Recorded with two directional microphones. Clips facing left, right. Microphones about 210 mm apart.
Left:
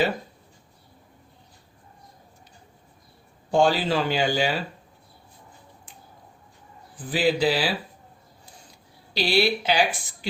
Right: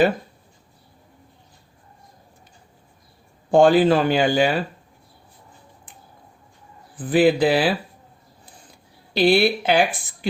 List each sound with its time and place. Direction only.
3.5 s speech: 55° right (ahead or behind)
6.9 s speech: 55° right (ahead or behind)
9.1 s speech: 55° right (ahead or behind)